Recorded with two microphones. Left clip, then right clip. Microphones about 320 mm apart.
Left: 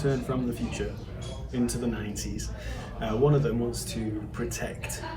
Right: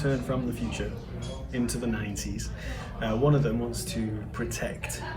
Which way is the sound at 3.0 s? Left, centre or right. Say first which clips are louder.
Left 1 dB; centre.